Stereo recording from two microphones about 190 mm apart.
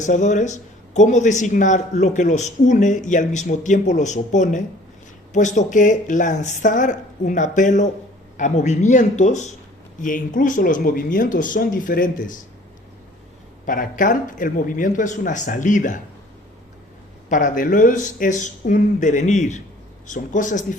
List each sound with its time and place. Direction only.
0.0 s speech: 40° left (ahead or behind)
13.7 s speech: 45° left (ahead or behind)
17.2 s speech: 45° left (ahead or behind)